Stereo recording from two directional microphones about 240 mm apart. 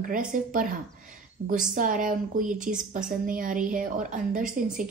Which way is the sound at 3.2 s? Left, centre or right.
Right.